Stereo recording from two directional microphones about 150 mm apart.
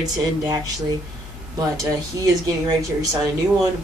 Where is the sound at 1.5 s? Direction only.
25° right (ahead or behind).